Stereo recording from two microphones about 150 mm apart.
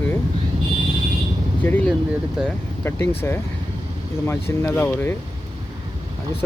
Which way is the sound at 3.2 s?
15° left (ahead or behind).